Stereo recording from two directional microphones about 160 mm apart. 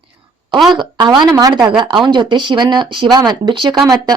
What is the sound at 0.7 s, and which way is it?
Speech, 30° right (ahead or behind).